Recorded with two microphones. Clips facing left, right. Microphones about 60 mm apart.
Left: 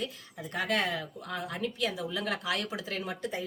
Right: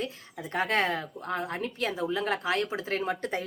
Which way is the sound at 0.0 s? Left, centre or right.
Right.